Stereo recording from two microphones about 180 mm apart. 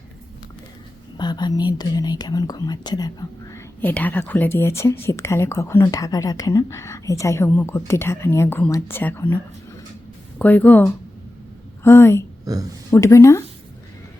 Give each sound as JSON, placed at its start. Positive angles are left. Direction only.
{"t": 1.1, "sound": "speech", "side_deg": 25}
{"t": 3.8, "sound": "speech", "side_deg": 10}
{"t": 12.5, "sound": "speech", "side_deg": -20}
{"t": 12.9, "sound": "speech", "side_deg": 15}